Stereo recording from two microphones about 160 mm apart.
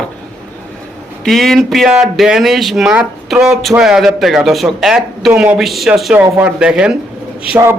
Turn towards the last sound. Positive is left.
turn(degrees=-15)  # may be behind; listen again after turning